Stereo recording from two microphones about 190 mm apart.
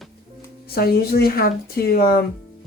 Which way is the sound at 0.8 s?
55° left (ahead or behind).